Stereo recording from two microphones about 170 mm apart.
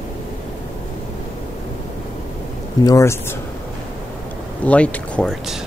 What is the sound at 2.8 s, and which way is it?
Speech, 20° left (ahead or behind).